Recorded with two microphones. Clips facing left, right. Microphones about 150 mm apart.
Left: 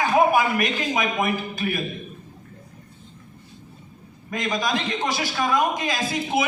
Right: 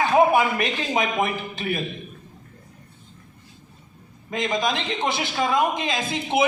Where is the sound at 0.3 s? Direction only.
30° right (ahead or behind).